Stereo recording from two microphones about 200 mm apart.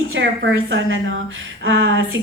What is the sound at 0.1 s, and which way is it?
A woman's voice, 70° right (ahead or behind).